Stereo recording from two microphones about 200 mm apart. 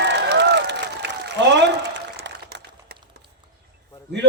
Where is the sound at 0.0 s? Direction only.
60° right (ahead or behind).